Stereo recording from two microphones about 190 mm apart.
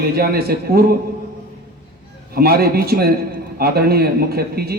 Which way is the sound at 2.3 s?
55° right (ahead or behind).